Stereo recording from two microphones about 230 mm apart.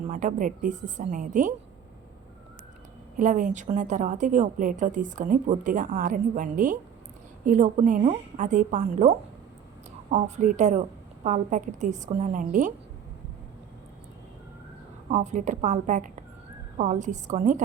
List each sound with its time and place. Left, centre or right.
0.0 s a woman's voice: right
3.2 s a woman's voice: right
15.1 s a woman's voice: right